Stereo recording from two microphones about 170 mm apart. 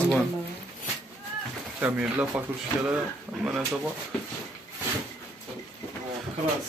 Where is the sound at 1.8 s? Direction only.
10° right (ahead or behind).